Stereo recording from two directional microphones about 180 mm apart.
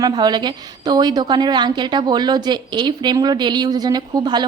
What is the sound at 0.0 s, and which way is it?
A woman's voice, 20° right (ahead or behind).